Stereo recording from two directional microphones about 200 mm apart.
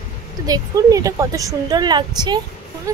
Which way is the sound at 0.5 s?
15° right (ahead or behind).